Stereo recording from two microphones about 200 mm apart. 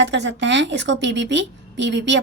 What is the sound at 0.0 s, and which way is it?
A woman's voice, 60° right (ahead or behind).